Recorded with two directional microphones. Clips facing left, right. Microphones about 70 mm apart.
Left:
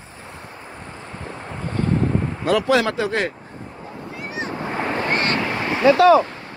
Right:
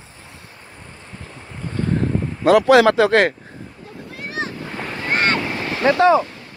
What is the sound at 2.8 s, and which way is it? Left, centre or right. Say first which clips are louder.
Speech: right 8 dB; right.